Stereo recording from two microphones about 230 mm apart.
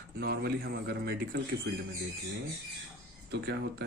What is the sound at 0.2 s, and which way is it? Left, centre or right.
A man's voice, right.